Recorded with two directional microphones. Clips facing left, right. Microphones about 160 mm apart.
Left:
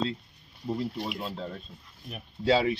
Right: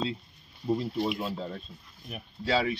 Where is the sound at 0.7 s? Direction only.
10° right (ahead or behind).